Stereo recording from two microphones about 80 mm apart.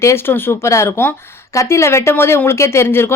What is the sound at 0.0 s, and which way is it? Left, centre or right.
Speech, left.